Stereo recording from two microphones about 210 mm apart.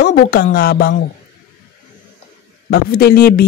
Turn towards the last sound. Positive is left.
turn(degrees=45)  # may be behind; listen again after turning